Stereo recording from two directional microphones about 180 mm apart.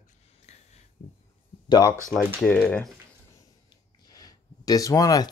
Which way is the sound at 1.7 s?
20° left (ahead or behind).